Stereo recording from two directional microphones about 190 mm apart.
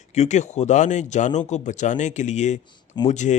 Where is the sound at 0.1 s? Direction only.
35° left (ahead or behind).